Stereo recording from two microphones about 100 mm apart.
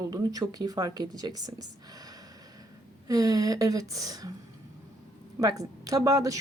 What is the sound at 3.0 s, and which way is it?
Speech, 40° right (ahead or behind).